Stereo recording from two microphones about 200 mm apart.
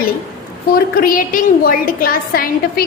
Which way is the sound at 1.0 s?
45° left (ahead or behind).